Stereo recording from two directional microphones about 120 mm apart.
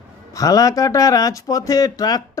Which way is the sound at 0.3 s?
30° left (ahead or behind).